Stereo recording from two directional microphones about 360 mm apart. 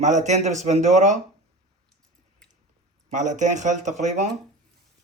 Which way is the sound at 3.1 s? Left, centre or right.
Centre.